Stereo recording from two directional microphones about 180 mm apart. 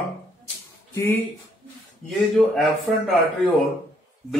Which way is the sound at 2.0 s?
Centre (ahead or behind).